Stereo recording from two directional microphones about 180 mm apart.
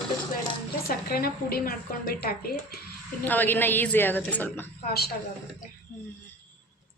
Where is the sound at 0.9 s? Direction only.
60° left (ahead or behind).